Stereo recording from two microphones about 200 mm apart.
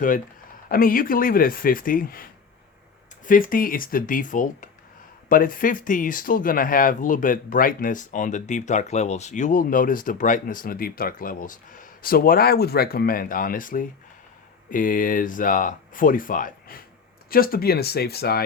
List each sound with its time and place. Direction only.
0.7 s speech: 45° left (ahead or behind)